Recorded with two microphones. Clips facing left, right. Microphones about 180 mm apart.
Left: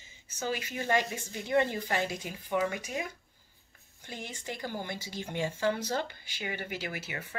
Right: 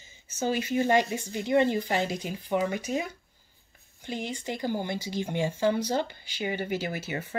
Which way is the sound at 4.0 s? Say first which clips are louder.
Right 8 dB; 20° right (ahead or behind).